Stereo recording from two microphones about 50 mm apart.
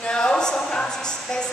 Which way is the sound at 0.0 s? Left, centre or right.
Centre.